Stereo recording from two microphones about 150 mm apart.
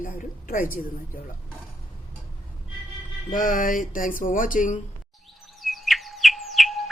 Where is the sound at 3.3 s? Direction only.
65° left (ahead or behind).